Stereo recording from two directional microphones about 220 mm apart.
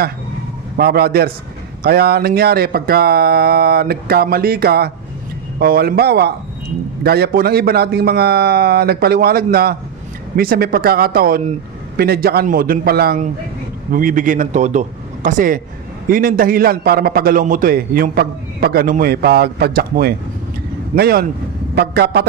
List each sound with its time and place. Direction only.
0.7 s a man's voice: 45° right (ahead or behind)